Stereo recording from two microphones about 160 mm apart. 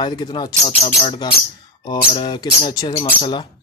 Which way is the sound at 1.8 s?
25° left (ahead or behind).